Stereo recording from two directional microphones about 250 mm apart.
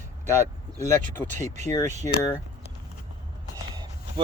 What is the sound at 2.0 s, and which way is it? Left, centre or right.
Speech, centre.